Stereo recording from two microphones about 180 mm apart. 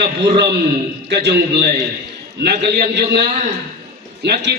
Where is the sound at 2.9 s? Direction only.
55° right (ahead or behind).